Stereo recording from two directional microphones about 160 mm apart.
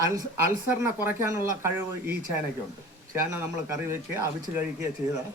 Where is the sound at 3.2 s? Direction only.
15° right (ahead or behind).